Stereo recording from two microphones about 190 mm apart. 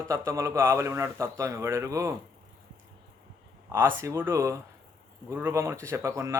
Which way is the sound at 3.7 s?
15° right (ahead or behind).